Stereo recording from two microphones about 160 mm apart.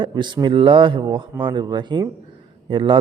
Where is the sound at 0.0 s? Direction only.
30° right (ahead or behind).